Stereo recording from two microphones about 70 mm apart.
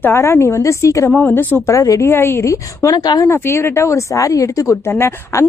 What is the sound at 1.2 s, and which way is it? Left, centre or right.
Speech, left.